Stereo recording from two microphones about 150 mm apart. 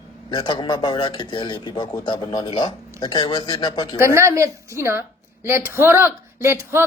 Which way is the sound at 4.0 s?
20° right (ahead or behind).